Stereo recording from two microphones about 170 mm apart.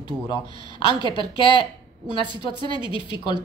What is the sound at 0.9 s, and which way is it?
Speech, 25° right (ahead or behind).